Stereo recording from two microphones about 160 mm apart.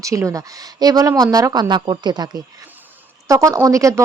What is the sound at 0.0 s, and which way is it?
Speech, 20° right (ahead or behind).